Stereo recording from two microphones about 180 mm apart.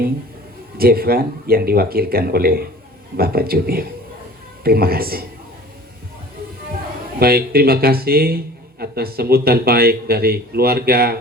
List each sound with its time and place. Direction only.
0.8 s speech: 55° right (ahead or behind)
7.2 s speech: 55° right (ahead or behind)